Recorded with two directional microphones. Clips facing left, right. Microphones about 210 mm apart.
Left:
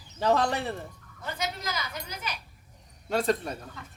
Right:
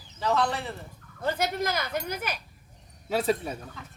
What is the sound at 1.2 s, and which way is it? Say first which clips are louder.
A man's voice: right 7 dB; 55° right (ahead or behind).